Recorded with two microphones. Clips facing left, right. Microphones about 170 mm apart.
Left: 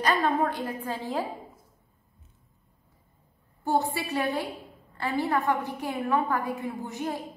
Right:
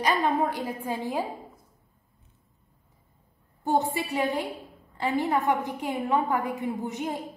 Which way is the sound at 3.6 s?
20° right (ahead or behind).